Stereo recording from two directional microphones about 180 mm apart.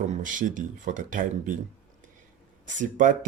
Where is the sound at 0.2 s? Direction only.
45° right (ahead or behind).